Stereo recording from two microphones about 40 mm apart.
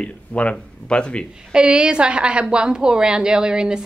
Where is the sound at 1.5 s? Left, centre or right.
Right.